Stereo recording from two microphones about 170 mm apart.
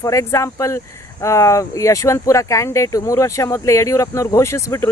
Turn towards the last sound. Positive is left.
turn(degrees=15)  # may be behind; listen again after turning